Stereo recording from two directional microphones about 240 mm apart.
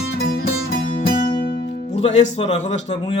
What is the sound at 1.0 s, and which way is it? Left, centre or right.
Speech, left.